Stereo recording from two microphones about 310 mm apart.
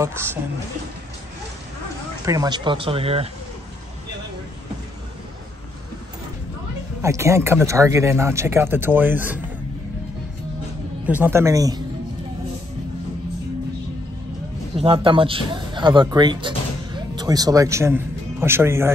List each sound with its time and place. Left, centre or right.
0.0 s speech: centre
2.2 s speech: centre
7.0 s speech: centre
11.1 s speech: centre
14.8 s speech: centre